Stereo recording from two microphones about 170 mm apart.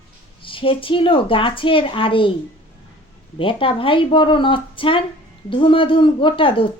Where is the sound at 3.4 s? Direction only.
30° left (ahead or behind).